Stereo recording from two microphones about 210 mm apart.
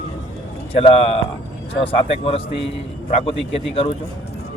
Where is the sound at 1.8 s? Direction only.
25° left (ahead or behind).